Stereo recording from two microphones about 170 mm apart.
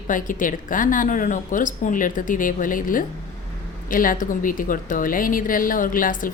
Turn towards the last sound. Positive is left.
turn(degrees=55)  # may be behind; listen again after turning